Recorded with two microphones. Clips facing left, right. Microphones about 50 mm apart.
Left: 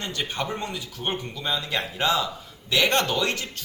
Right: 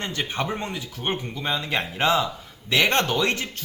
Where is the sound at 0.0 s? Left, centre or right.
Right.